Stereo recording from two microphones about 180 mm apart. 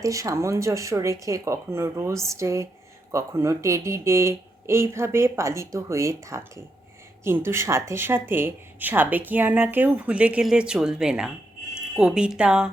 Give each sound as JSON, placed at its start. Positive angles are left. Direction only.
{"t": 0.0, "sound": "speech", "side_deg": -20}